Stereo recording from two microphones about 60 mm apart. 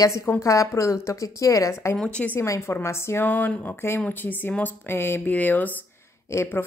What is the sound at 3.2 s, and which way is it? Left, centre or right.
A woman's voice, left.